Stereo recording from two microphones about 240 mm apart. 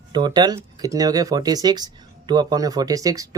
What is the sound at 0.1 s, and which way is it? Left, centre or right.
Speech, centre.